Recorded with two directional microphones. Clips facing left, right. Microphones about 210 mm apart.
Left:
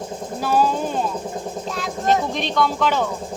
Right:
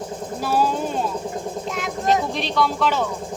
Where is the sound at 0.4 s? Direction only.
10° right (ahead or behind).